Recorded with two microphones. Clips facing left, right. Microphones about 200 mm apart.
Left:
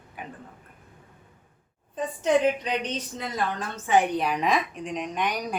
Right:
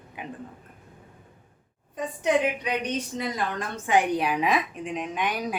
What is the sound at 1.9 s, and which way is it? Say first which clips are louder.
A woman's voice: left 1 dB; 15° right (ahead or behind).